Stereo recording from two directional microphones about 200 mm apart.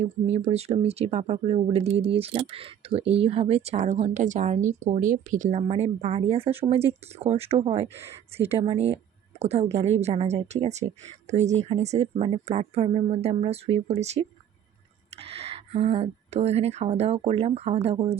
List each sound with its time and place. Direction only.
0.0 s speech: 30° right (ahead or behind)